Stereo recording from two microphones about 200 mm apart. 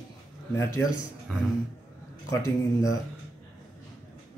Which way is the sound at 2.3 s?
15° left (ahead or behind).